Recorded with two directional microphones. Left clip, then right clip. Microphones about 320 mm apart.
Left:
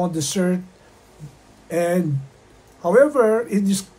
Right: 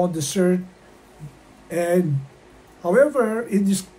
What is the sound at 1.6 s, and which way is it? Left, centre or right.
Speech, centre.